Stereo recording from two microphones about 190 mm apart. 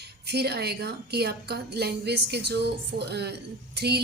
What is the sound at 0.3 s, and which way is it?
Speech, 60° right (ahead or behind).